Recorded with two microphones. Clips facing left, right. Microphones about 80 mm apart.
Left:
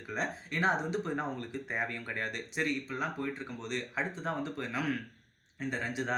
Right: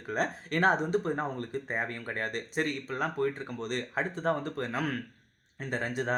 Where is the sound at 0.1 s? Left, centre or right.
Right.